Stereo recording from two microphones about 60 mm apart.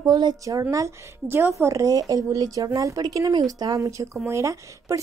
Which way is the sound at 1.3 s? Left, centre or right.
Right.